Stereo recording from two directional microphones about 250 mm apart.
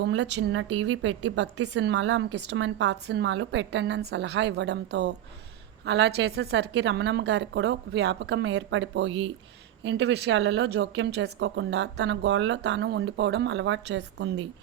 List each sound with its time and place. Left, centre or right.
0.0 s speech: right